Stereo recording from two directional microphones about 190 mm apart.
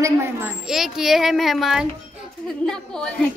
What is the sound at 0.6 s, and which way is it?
A child's voice, centre (ahead or behind).